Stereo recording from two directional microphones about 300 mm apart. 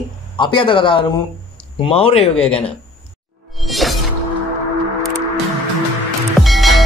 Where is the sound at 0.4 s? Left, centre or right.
Centre.